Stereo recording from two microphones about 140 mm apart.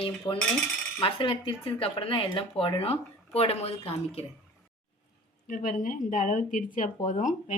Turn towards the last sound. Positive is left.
turn(degrees=65)  # may be behind; listen again after turning